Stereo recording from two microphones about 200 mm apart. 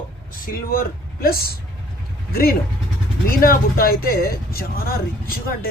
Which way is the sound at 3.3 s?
45° left (ahead or behind).